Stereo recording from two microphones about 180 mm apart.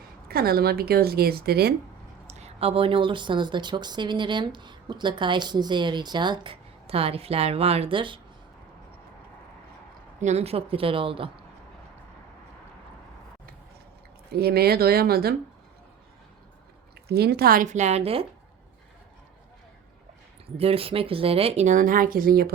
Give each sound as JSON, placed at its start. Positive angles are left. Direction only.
{"t": 0.3, "sound": "a woman's voice", "side_deg": -60}
{"t": 2.2, "sound": "speech", "side_deg": -35}
{"t": 10.2, "sound": "speech", "side_deg": -40}
{"t": 14.3, "sound": "a woman's voice", "side_deg": -60}
{"t": 17.1, "sound": "speech", "side_deg": -60}
{"t": 20.6, "sound": "speech", "side_deg": -30}